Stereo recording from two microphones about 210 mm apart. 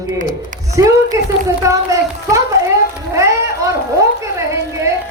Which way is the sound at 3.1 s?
15° right (ahead or behind).